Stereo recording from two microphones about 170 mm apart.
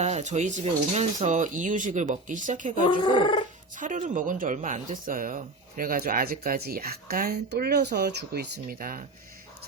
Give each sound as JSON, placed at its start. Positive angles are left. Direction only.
{"t": 0.0, "sound": "speech", "side_deg": -40}
{"t": 3.0, "sound": "speech", "side_deg": 30}
{"t": 3.8, "sound": "speech", "side_deg": -50}